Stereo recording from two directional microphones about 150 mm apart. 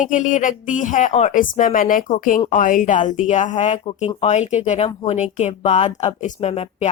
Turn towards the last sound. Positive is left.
turn(degrees=45)  # may be behind; listen again after turning